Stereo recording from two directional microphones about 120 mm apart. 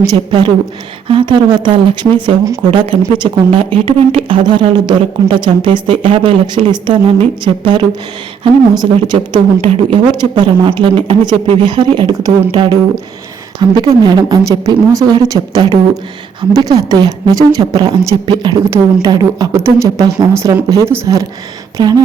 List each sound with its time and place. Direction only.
0.0 s a woman's voice: 35° right (ahead or behind)